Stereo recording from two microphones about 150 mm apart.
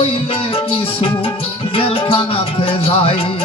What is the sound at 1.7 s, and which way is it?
Music, 35° left (ahead or behind).